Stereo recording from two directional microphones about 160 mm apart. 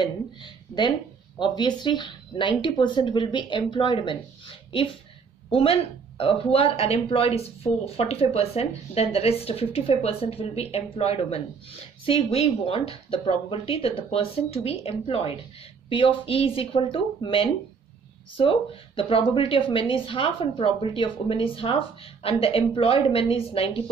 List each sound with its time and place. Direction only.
0.0 s speech: 25° left (ahead or behind)